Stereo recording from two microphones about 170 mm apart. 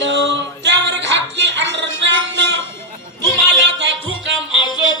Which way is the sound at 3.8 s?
90° right.